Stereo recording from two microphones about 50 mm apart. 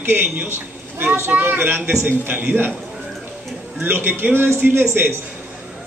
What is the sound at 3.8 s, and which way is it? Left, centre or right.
Speech, right.